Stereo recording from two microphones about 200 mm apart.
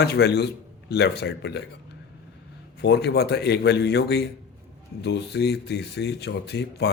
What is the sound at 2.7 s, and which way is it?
Speech, 55° left (ahead or behind).